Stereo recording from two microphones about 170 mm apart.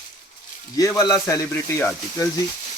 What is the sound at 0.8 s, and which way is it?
Speech, 20° left (ahead or behind).